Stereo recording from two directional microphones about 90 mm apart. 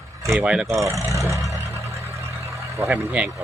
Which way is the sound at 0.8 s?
35° right (ahead or behind).